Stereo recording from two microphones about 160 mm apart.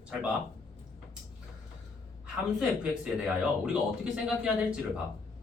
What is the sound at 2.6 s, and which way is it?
Speech, 5° right (ahead or behind).